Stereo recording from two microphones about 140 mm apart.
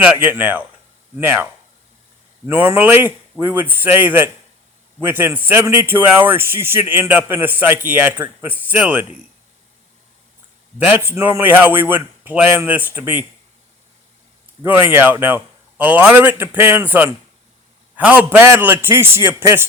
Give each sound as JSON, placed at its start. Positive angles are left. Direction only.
{"t": 0.0, "sound": "a man's voice", "side_deg": -10}
{"t": 2.5, "sound": "a man's voice", "side_deg": -15}
{"t": 10.8, "sound": "a man's voice", "side_deg": -15}
{"t": 14.6, "sound": "a man's voice", "side_deg": -15}